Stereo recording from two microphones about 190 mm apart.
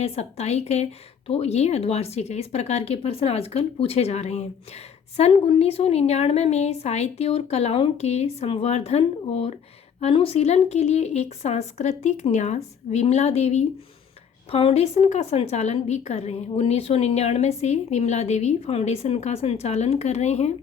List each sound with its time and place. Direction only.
0.0 s a woman's voice: 35° left (ahead or behind)